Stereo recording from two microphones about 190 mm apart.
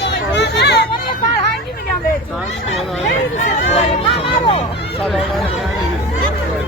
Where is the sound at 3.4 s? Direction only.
40° left (ahead or behind).